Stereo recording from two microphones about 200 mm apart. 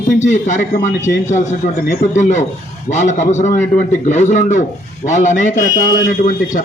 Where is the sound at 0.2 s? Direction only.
35° left (ahead or behind).